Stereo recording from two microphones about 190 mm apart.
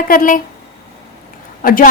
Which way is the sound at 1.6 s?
45° left (ahead or behind).